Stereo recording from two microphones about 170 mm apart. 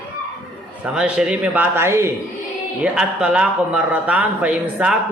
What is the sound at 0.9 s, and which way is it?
Speech, 5° right (ahead or behind).